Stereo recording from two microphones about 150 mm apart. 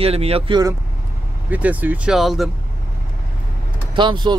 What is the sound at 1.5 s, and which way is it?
Speech, 10° right (ahead or behind).